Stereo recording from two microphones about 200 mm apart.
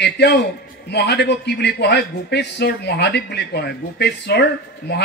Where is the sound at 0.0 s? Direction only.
55° left (ahead or behind).